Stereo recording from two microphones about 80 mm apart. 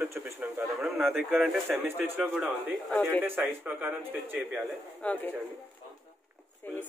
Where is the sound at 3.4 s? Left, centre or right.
Centre.